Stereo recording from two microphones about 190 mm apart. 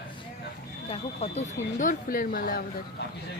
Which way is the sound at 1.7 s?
45° left (ahead or behind).